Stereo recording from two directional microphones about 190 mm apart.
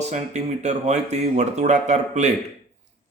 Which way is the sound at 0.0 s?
35° right (ahead or behind).